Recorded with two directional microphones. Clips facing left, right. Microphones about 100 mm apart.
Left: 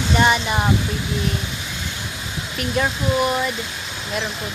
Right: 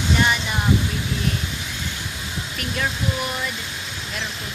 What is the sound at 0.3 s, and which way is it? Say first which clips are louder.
Speech: left 5 dB; 30° left (ahead or behind).